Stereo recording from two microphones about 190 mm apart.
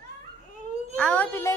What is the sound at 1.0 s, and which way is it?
Speech, 5° left (ahead or behind).